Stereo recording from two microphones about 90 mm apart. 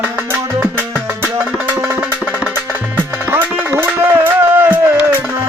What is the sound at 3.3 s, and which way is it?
Music, 20° right (ahead or behind).